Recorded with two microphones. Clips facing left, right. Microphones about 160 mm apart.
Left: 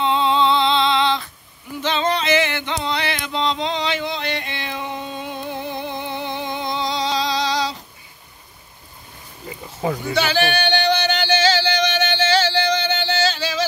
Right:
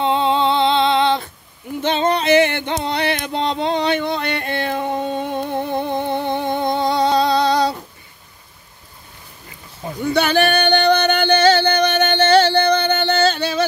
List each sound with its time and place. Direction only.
0.0 s female singing: 50° right (ahead or behind)
1.8 s music: 55° right (ahead or behind)
9.8 s a sound: 90° left
10.1 s music: 55° right (ahead or behind)